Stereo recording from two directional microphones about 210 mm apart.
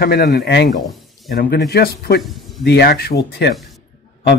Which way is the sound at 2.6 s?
50° left (ahead or behind).